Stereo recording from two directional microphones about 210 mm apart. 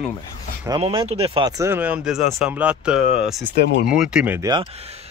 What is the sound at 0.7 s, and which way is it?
Speech, 25° right (ahead or behind).